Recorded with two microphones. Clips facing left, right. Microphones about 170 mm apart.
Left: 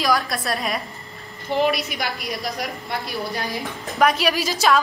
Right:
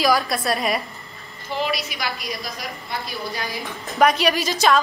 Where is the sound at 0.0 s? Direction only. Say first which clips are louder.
Right 2 dB; centre (ahead or behind).